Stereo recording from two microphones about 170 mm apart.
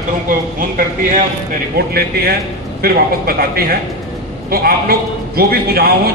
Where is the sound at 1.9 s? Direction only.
65° right (ahead or behind).